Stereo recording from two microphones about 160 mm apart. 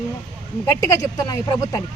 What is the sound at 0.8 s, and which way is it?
Speech, 20° left (ahead or behind).